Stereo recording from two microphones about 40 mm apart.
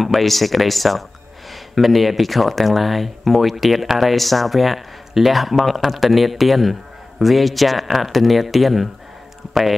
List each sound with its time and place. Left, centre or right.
0.0 s speech: centre